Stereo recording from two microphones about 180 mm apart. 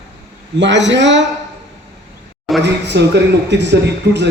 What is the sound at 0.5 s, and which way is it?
Speech, 85° right.